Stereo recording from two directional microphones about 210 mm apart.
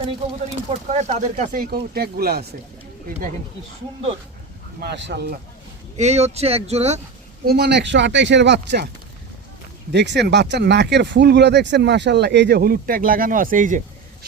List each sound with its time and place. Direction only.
0.9 s speech: 30° right (ahead or behind); by 2.5 s 50° right (ahead or behind)
4.8 s speech: 55° right (ahead or behind)
6.0 s speech: 30° right (ahead or behind)
7.4 s speech: 50° right (ahead or behind)
9.9 s speech: 55° right (ahead or behind); by 13.8 s 40° right (ahead or behind)